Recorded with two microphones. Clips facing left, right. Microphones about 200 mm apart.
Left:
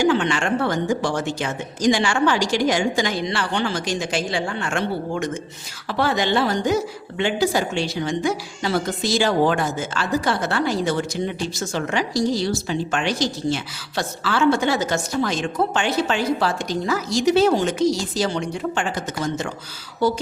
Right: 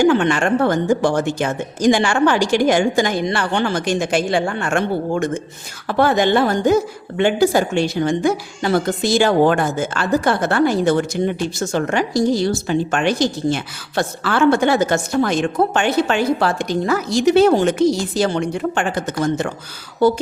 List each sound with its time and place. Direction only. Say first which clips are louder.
0.0 s a woman's voice: right 4 dB; 55° right (ahead or behind)